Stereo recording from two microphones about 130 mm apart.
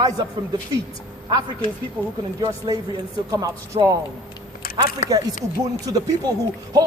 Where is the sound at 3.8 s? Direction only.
50° right (ahead or behind).